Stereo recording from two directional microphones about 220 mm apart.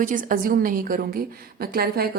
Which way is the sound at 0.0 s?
35° right (ahead or behind).